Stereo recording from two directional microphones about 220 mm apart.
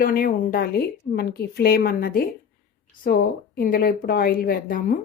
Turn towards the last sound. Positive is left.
turn(degrees=40)  # may be behind; listen again after turning